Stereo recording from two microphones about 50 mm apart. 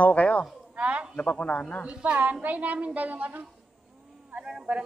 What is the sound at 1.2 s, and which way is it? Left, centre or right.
Speech, left.